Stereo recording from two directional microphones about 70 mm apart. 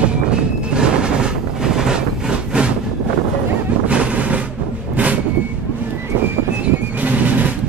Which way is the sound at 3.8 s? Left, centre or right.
Centre.